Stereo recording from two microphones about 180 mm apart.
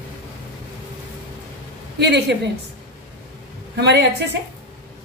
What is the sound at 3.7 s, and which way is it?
Speech, 70° right (ahead or behind).